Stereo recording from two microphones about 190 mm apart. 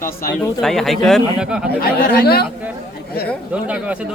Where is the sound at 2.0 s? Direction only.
55° left (ahead or behind).